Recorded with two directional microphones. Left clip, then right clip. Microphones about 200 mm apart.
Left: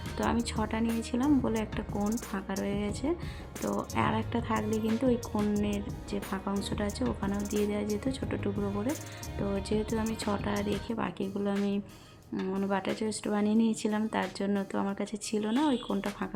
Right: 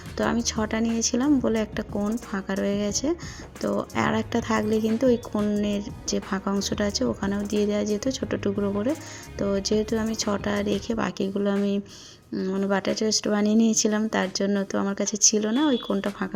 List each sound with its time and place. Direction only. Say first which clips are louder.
0.2 s speech: right 6 dB; 20° right (ahead or behind)